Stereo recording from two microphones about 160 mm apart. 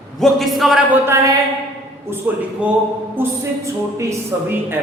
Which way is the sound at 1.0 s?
20° right (ahead or behind).